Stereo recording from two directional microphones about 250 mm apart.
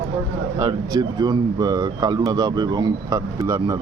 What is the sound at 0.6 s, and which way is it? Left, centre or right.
Speech, centre.